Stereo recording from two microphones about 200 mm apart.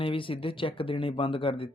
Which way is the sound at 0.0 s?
25° left (ahead or behind).